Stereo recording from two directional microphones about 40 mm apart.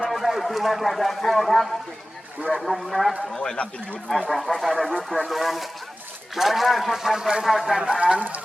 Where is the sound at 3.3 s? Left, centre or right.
Centre.